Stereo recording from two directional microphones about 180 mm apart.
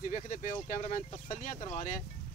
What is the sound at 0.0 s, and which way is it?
Speech, 45° left (ahead or behind).